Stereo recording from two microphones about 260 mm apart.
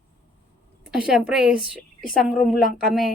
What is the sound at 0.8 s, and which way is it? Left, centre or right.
A woman's voice, centre.